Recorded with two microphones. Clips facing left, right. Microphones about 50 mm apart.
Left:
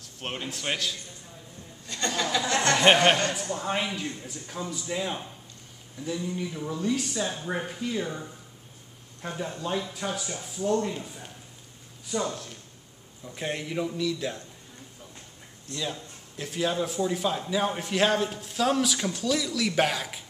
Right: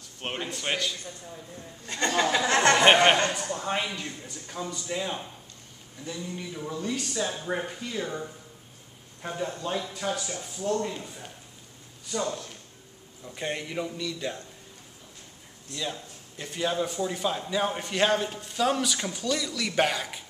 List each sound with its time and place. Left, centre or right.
0.5 s speech: centre
1.9 s a sound: right
3.5 s speech: centre
15.7 s speech: centre